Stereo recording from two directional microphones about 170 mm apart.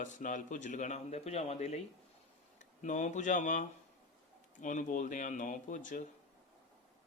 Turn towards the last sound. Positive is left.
turn(degrees=50)  # may be behind; listen again after turning